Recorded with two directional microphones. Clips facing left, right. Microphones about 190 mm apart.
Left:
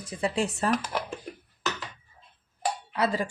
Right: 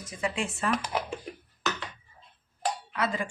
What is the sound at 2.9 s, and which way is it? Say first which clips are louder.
Speech: left 5 dB; 35° left (ahead or behind).